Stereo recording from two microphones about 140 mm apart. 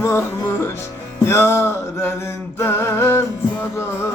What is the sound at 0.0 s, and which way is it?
Music, 20° left (ahead or behind).